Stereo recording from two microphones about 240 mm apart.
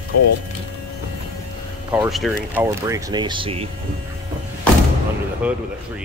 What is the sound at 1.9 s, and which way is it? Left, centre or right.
Speech, centre.